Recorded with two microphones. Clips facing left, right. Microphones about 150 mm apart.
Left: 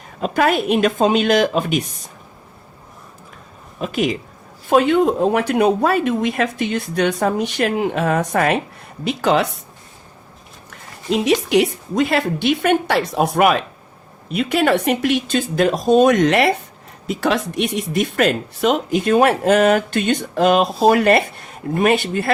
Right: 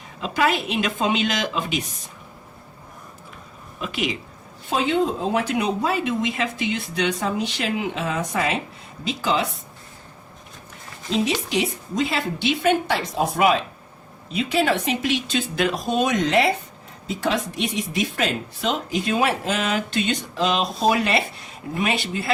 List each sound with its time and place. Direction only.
0.2 s speech: 50° left (ahead or behind)
3.8 s speech: 45° left (ahead or behind)
4.7 s speech: 60° left (ahead or behind)
10.7 s speech: 65° left (ahead or behind); by 16.1 s 45° left (ahead or behind)
16.1 s speech: 70° left (ahead or behind)